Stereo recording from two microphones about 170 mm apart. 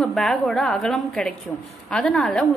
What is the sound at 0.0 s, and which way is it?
A woman's voice, centre (ahead or behind).